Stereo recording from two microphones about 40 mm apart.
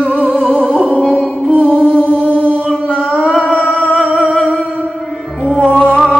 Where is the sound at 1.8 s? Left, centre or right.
Right.